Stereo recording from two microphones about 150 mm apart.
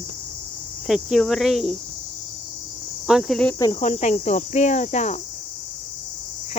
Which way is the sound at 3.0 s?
Centre (ahead or behind).